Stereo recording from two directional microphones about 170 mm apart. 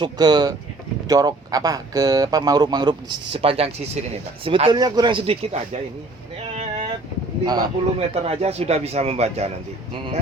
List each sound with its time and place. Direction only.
0.0 s speech: 25° right (ahead or behind)
6.4 s boat: 40° right (ahead or behind)
7.4 s speech: 25° right (ahead or behind)
7.9 s speech: 35° right (ahead or behind)